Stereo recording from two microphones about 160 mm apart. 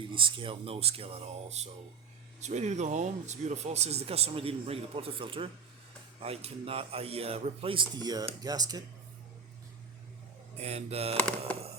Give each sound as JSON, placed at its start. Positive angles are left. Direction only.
{"t": 0.0, "sound": "speech", "side_deg": -30}
{"t": 10.6, "sound": "speech", "side_deg": -40}
{"t": 11.2, "sound": "speech", "side_deg": 10}